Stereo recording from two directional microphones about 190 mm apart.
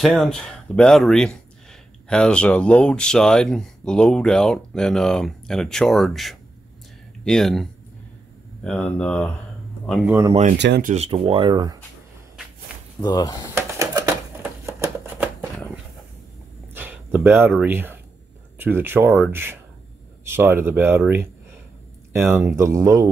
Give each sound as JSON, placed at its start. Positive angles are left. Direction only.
{"t": 0.0, "sound": "speech", "side_deg": 0}
{"t": 10.8, "sound": "speech", "side_deg": -40}
{"t": 11.1, "sound": "speech", "side_deg": -30}
{"t": 13.0, "sound": "speech", "side_deg": 20}
{"t": 13.6, "sound": "typewriter", "side_deg": -15}
{"t": 14.7, "sound": "shuffling cards", "side_deg": -10}
{"t": 16.7, "sound": "a sound", "side_deg": -10}
{"t": 18.6, "sound": "speech", "side_deg": -10}
{"t": 22.3, "sound": "speech", "side_deg": -10}